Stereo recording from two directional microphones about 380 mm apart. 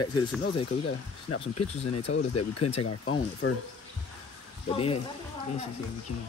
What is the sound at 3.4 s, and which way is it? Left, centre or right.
Speech, left.